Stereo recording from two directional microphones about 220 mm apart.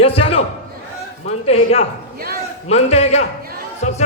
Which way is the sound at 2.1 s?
45° right (ahead or behind).